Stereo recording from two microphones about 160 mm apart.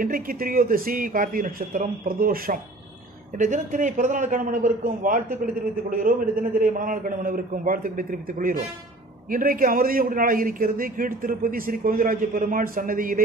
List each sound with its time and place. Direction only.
0.0 s a man's voice: 65° right (ahead or behind)
3.3 s a man's voice: 50° right (ahead or behind)